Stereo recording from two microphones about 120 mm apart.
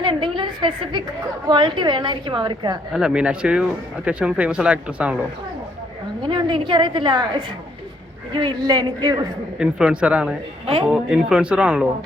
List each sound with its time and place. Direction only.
0.0 s a sound: 45° right (ahead or behind)
1.5 s a woman's voice: 40° right (ahead or behind)
2.9 s speech: 5° right (ahead or behind)
6.2 s a woman's voice: 40° right (ahead or behind)
9.6 s speech: 5° right (ahead or behind)